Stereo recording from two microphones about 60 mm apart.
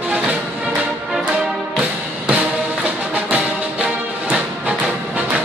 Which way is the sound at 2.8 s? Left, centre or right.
Right.